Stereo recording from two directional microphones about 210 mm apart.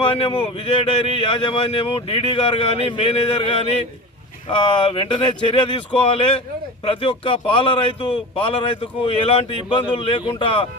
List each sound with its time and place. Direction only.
0.0 s speech: 25° left (ahead or behind)